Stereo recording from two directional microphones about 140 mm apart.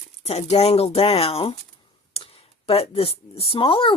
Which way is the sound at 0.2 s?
50° left (ahead or behind).